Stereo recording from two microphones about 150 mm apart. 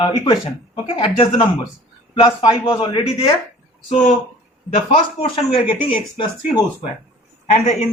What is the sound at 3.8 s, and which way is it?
A man's voice, 45° left (ahead or behind).